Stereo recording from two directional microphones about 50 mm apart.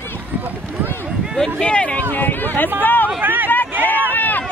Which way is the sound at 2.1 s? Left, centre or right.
Left.